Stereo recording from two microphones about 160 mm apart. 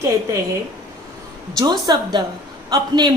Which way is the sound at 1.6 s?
25° right (ahead or behind).